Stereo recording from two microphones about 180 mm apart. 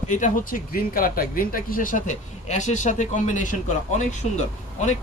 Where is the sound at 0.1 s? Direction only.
45° left (ahead or behind).